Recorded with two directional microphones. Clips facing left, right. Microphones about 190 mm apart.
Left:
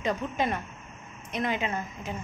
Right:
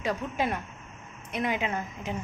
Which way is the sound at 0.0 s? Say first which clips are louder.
Left 1 dB; 5° right (ahead or behind).